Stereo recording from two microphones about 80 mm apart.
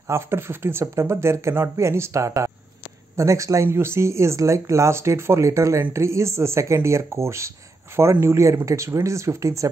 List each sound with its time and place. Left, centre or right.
0.1 s speech: right